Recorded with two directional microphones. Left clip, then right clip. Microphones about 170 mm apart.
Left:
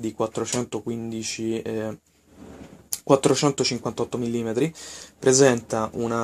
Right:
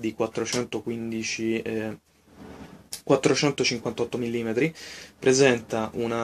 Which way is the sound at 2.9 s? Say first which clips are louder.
Left 3 dB; 30° left (ahead or behind).